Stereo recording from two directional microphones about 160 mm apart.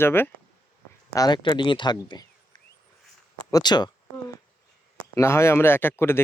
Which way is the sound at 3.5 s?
25° left (ahead or behind).